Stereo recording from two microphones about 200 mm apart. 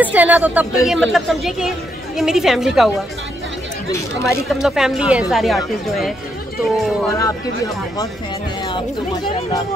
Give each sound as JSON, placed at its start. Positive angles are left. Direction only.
{"t": 0.0, "sound": "speech", "side_deg": -10}
{"t": 3.9, "sound": "speech", "side_deg": 15}
{"t": 4.6, "sound": "speech", "side_deg": 0}
{"t": 7.2, "sound": "speech", "side_deg": 15}